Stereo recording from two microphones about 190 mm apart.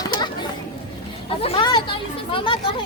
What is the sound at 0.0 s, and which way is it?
Chatter, 20° left (ahead or behind).